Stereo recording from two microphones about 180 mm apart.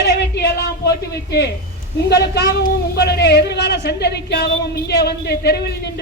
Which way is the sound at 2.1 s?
65° left (ahead or behind).